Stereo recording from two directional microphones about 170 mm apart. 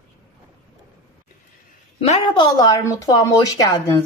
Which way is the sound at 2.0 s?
35° left (ahead or behind).